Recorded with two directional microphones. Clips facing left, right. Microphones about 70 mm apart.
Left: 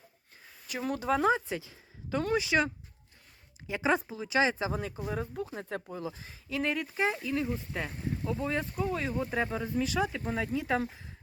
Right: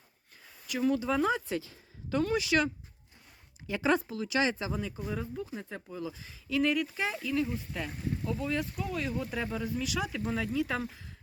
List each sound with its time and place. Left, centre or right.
0.9 s speech: left
1.5 s speech: centre
2.2 s speech: left
3.7 s speech: centre
4.3 s speech: left
4.7 s speech: left
5.9 s speech: left